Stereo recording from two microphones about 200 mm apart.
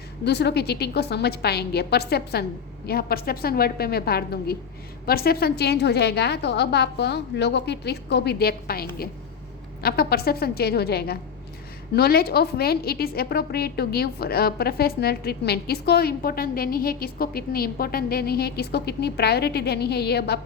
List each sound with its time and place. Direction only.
0.3 s a woman's voice: 55° left (ahead or behind)